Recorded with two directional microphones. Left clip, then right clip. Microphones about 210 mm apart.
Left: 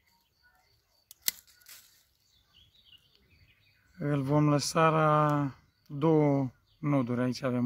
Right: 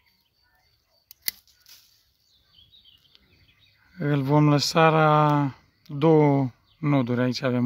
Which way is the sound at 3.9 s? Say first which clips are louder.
Right 6 dB; 50° right (ahead or behind).